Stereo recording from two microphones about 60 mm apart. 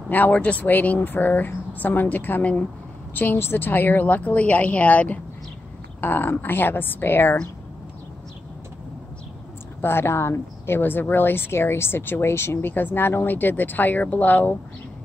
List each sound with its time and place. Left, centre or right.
0.1 s speech: left
9.8 s speech: left